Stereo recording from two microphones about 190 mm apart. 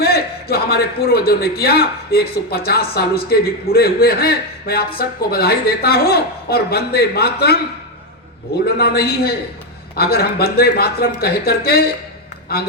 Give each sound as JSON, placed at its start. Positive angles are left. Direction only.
{"t": 0.0, "sound": "a man's voice", "side_deg": 55}
{"t": 8.6, "sound": "a man's voice", "side_deg": 55}